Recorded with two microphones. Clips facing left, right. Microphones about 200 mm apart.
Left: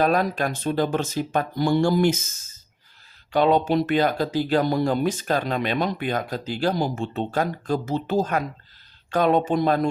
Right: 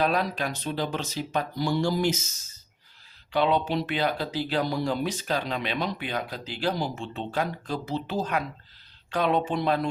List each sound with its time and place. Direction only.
0.0 s speech: 45° left (ahead or behind)
3.3 s speech: 45° left (ahead or behind)